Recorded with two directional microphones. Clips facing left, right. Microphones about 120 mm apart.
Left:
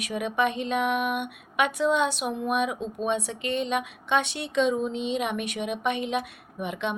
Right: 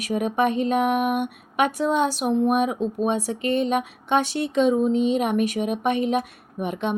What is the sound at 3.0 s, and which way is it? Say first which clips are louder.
Speech: right 3 dB; 40° right (ahead or behind).